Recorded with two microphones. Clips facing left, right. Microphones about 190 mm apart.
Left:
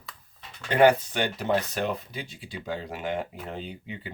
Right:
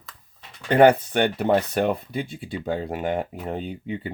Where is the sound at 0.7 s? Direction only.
55° right (ahead or behind).